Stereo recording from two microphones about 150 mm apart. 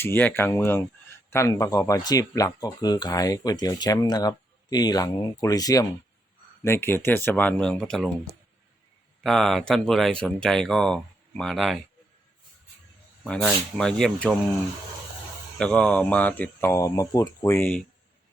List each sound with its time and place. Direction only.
0.0 s speech: 15° left (ahead or behind)
9.2 s speech: centre (ahead or behind)
13.2 s speech: 5° left (ahead or behind)
15.5 s speech: 5° left (ahead or behind)